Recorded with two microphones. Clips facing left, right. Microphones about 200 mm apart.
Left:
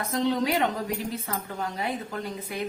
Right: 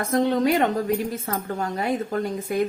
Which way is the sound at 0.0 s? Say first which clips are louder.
Right 5 dB; 50° right (ahead or behind).